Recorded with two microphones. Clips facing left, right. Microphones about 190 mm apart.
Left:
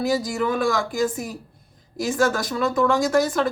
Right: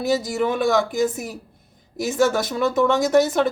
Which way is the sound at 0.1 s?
20° right (ahead or behind).